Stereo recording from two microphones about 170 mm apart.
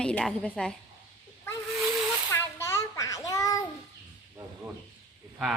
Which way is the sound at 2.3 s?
15° left (ahead or behind).